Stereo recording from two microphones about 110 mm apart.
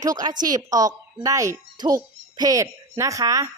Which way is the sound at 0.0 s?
35° right (ahead or behind).